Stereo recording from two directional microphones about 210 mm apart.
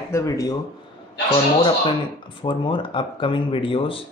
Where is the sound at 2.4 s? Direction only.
25° left (ahead or behind).